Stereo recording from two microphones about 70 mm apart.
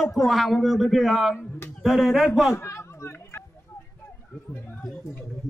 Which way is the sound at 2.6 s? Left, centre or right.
Left.